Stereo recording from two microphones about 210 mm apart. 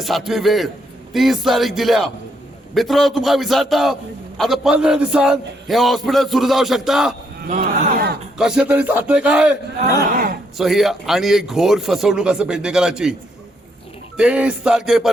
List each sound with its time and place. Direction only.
0.0 s a man's voice: centre (ahead or behind)
7.5 s speech: 45° right (ahead or behind)
8.4 s a man's voice: 5° right (ahead or behind)
10.6 s a man's voice: centre (ahead or behind)
14.2 s a man's voice: 5° right (ahead or behind)